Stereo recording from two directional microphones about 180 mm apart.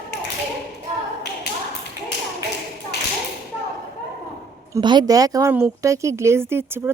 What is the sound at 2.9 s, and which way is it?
Tap, 65° left (ahead or behind).